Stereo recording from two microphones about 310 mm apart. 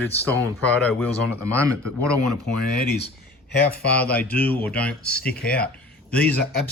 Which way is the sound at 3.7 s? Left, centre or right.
Left.